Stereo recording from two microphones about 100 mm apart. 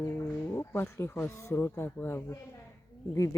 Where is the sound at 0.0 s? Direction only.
25° left (ahead or behind).